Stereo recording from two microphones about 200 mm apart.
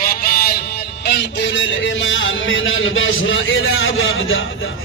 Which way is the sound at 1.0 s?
60° left (ahead or behind).